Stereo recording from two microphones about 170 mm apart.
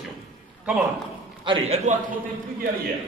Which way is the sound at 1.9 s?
45° right (ahead or behind).